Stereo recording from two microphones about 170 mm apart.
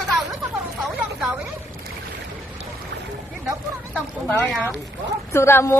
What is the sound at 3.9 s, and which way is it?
Speech, 10° left (ahead or behind).